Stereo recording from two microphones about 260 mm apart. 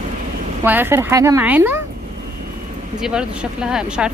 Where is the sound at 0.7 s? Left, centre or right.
Centre.